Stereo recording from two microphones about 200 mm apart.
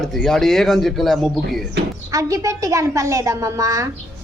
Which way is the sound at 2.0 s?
15° right (ahead or behind).